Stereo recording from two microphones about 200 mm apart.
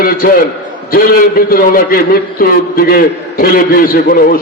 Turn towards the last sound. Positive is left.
turn(degrees=45)  # may be behind; listen again after turning